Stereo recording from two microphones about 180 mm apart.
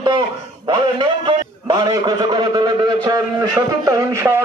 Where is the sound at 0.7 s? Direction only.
25° right (ahead or behind).